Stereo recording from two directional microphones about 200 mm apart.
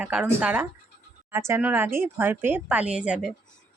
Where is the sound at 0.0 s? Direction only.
5° right (ahead or behind).